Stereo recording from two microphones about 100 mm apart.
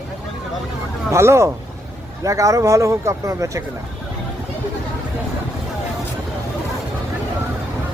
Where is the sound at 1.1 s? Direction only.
30° right (ahead or behind).